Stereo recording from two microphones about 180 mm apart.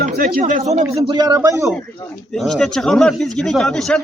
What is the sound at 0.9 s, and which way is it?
Speech, 20° right (ahead or behind).